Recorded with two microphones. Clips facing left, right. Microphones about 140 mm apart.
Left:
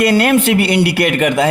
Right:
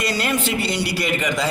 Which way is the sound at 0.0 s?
55° left (ahead or behind).